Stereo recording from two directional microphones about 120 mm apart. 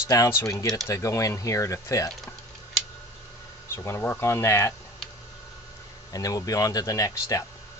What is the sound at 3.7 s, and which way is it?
Speech, 20° left (ahead or behind).